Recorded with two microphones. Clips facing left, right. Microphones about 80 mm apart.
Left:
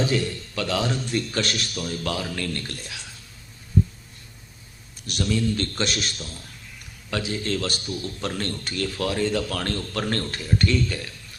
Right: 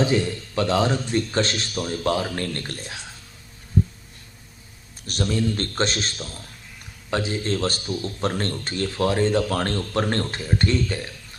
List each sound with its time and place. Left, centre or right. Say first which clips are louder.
0.0 s speech: right 3 dB; right
5.0 s speech: right 1 dB; right
6.1 s a man's voice: right 2 dB; centre
7.1 s speech: right 2 dB; right